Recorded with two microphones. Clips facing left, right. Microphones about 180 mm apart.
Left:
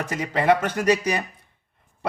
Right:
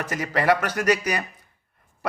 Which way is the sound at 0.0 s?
25° left (ahead or behind).